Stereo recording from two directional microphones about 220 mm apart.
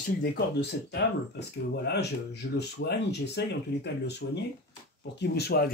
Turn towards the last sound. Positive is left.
turn(degrees=45)  # may be behind; listen again after turning